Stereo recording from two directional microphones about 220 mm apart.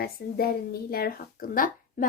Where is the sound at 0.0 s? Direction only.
45° left (ahead or behind).